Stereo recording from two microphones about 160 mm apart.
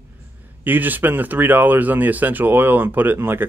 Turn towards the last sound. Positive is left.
turn(degrees=-15)  # may be behind; listen again after turning